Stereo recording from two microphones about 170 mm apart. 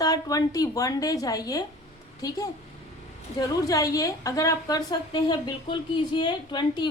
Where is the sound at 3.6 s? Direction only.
20° left (ahead or behind).